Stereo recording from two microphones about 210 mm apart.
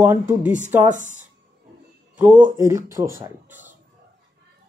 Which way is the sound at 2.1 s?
5° right (ahead or behind).